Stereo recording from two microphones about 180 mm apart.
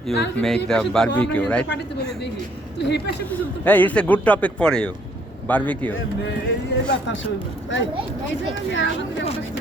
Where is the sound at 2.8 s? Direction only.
70° left (ahead or behind).